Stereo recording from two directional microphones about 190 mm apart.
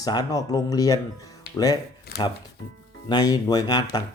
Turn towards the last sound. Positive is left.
turn(degrees=20)  # may be behind; listen again after turning